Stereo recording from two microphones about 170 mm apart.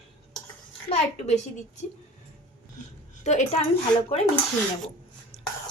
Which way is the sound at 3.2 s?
45° left (ahead or behind).